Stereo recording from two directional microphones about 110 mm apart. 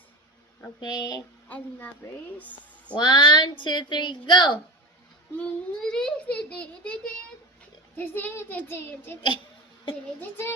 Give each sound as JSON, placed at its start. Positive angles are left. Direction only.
{"t": 0.8, "sound": "speech", "side_deg": 40}
{"t": 1.5, "sound": "a child's voice", "side_deg": 15}
{"t": 2.4, "sound": "a sound", "side_deg": 15}
{"t": 2.9, "sound": "a woman's voice", "side_deg": 40}
{"t": 5.4, "sound": "a child's voice", "side_deg": 10}
{"t": 7.9, "sound": "child singing", "side_deg": 20}
{"t": 10.2, "sound": "child singing", "side_deg": 20}